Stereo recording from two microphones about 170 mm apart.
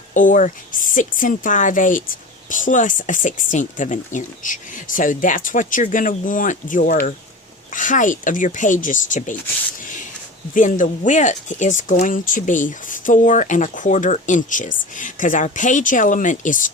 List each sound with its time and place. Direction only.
0.1 s speech: 50° left (ahead or behind)
9.8 s a sound: 50° left (ahead or behind)
10.5 s speech: 50° left (ahead or behind)